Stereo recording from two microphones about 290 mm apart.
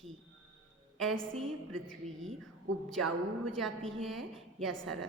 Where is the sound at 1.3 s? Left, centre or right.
Centre.